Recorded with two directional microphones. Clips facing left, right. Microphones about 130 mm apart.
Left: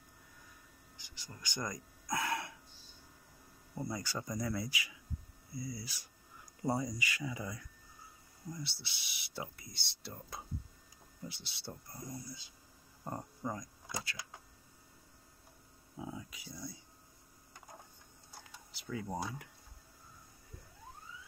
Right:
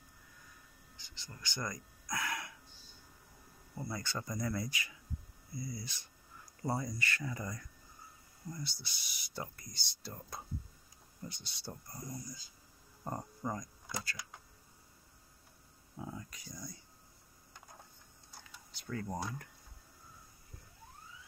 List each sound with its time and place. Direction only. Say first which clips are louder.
0.9 s speech: left 1 dB; 15° left (ahead or behind)
3.7 s speech: left 1 dB; 15° left (ahead or behind)
13.0 s a sound: right 1 dB; 10° right (ahead or behind)
16.0 s speech: left 1 dB; 5° left (ahead or behind)
18.7 s speech: even; 5° left (ahead or behind)